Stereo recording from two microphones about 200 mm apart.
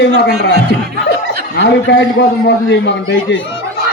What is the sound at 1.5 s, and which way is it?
A man's voice, 60° left (ahead or behind).